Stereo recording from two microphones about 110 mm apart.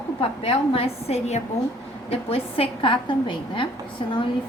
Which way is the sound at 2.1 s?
60° left (ahead or behind).